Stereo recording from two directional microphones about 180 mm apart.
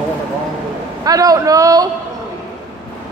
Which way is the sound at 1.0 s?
20° right (ahead or behind).